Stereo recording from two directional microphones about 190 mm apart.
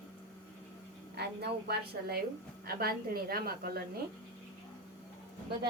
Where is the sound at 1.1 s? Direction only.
60° right (ahead or behind).